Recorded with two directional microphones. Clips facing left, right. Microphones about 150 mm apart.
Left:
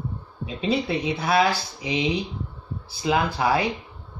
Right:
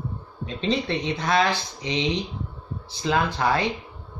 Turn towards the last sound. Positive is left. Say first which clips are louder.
# left 1 dB
turn(degrees=10)  # may be behind; listen again after turning